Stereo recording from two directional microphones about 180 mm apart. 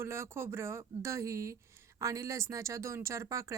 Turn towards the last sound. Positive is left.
turn(degrees=-15)  # may be behind; listen again after turning